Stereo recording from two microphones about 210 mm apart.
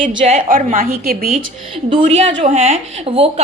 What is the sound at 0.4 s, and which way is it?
Speech, 40° right (ahead or behind).